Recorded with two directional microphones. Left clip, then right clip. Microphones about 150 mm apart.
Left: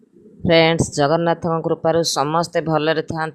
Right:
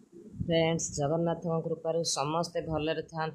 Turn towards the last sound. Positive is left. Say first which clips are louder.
# left 13 dB
turn(degrees=50)  # may be behind; listen again after turning